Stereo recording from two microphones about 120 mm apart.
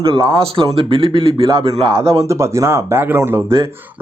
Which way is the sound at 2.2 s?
25° right (ahead or behind).